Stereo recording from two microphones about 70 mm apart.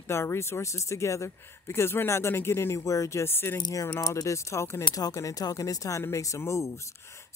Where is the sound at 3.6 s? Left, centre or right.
Left.